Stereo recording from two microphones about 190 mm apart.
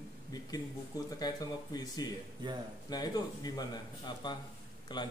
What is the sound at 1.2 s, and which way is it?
Speech, 20° left (ahead or behind).